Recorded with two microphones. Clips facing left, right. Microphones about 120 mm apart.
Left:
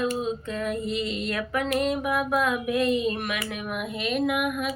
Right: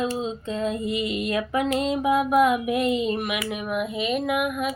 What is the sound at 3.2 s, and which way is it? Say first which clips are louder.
Speech: right 3 dB; 10° right (ahead or behind).